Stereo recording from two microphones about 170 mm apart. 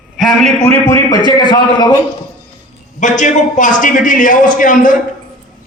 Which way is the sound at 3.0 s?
45° left (ahead or behind).